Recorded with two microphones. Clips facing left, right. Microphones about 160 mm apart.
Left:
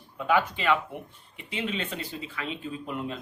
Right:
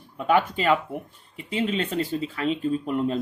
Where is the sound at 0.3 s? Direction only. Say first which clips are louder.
Right 3 dB; 40° right (ahead or behind).